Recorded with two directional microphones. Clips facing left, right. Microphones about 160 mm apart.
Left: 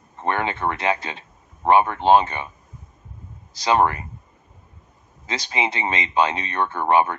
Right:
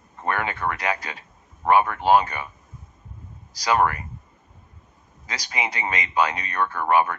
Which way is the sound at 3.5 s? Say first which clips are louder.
Left 2 dB; 25° left (ahead or behind).